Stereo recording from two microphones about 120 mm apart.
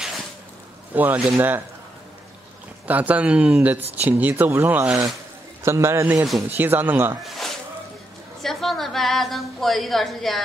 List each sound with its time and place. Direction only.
0.9 s speech: 15° right (ahead or behind)
2.9 s speech: 10° right (ahead or behind)
5.6 s a man's voice: 20° right (ahead or behind)
7.2 s a sound: centre (ahead or behind)
8.4 s a woman's voice: centre (ahead or behind)